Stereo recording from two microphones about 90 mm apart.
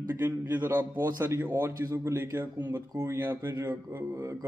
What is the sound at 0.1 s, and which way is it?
A man's voice, 25° right (ahead or behind).